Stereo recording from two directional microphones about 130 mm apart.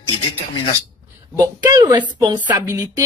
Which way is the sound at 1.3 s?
25° right (ahead or behind).